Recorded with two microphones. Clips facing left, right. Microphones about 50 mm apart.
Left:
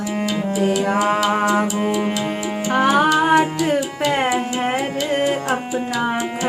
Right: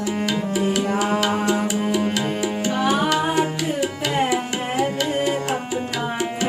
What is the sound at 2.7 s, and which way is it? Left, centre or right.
Music, left.